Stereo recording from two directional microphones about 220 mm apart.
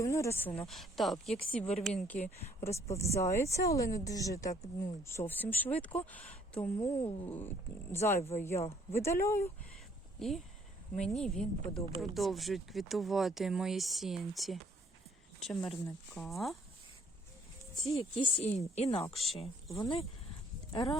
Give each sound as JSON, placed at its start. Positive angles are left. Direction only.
{"t": 0.0, "sound": "speech", "side_deg": 15}
{"t": 2.2, "sound": "speech", "side_deg": 30}
{"t": 3.2, "sound": "speech", "side_deg": 15}
{"t": 6.7, "sound": "a woman's voice", "side_deg": 25}
{"t": 7.3, "sound": "speech", "side_deg": 10}
{"t": 10.2, "sound": "speech", "side_deg": 0}
{"t": 18.2, "sound": "a woman's voice", "side_deg": 30}
{"t": 19.1, "sound": "speech", "side_deg": 0}
{"t": 19.7, "sound": "a woman's voice", "side_deg": 20}